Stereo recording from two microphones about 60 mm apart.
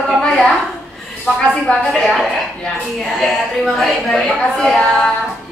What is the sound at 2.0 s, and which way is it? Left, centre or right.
A woman's voice, centre.